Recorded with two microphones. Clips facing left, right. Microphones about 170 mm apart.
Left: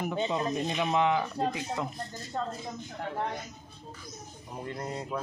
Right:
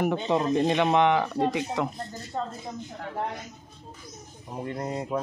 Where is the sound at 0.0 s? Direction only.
70° right (ahead or behind).